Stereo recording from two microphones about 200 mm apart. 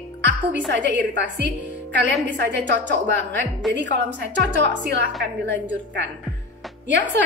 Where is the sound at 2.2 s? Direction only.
65° right (ahead or behind).